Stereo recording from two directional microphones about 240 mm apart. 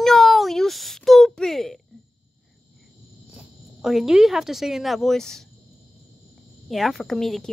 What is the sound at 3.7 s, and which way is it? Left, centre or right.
Speech, centre.